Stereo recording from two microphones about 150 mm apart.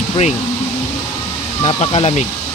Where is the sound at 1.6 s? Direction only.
45° left (ahead or behind).